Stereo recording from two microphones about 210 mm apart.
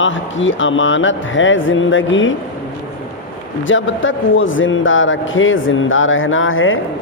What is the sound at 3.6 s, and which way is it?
A man's voice, 65° left (ahead or behind).